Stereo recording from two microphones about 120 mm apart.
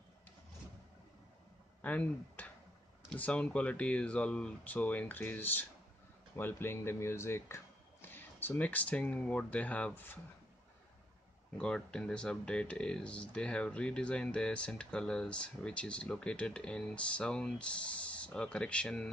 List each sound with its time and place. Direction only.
1.8 s speech: 15° left (ahead or behind)
11.5 s speech: 10° left (ahead or behind)